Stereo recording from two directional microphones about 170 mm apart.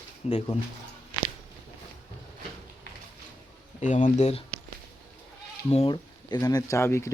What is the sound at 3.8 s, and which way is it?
Speech, 45° left (ahead or behind).